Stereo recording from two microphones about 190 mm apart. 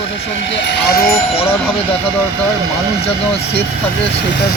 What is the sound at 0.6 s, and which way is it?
Speech, 60° left (ahead or behind).